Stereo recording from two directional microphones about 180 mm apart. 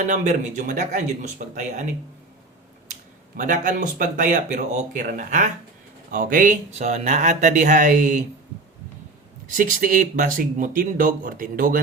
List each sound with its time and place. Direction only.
0.0 s speech: 45° right (ahead or behind)
3.3 s speech: 45° right (ahead or behind)
9.5 s speech: 45° right (ahead or behind)